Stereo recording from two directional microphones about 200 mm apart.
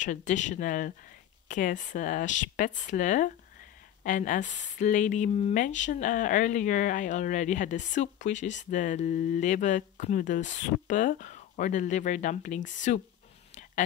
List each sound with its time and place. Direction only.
0.0 s a woman's voice: 35° left (ahead or behind)